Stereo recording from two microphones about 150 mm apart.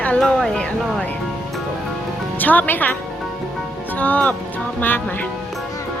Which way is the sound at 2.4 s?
10° left (ahead or behind).